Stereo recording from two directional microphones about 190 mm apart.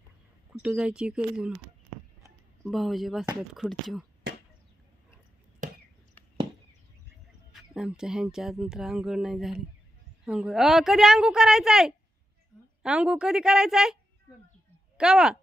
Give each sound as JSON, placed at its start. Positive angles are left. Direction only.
{"t": 0.5, "sound": "speech", "side_deg": -5}
{"t": 2.6, "sound": "speech", "side_deg": 0}
{"t": 5.6, "sound": "chop", "side_deg": -40}
{"t": 7.5, "sound": "speech", "side_deg": -5}
{"t": 15.0, "sound": "speech", "side_deg": -5}